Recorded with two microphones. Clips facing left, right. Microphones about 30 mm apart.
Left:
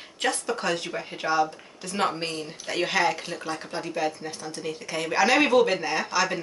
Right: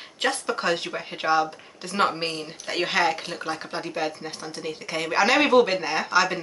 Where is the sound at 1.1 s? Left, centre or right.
Right.